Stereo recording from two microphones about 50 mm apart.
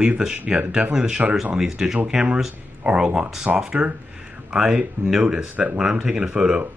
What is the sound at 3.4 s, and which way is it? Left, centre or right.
Speech, centre.